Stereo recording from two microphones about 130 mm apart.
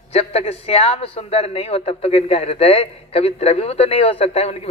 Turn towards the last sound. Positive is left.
turn(degrees=55)  # may be behind; listen again after turning